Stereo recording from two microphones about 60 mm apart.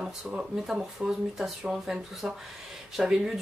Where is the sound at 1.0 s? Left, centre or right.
Centre.